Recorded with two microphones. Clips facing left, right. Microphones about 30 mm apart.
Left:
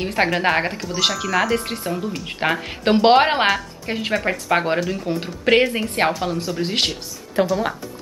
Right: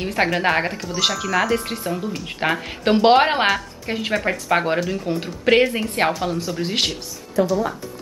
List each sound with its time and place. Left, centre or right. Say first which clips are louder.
0.0 s speech: left 1 dB; centre
7.4 s speech: even; left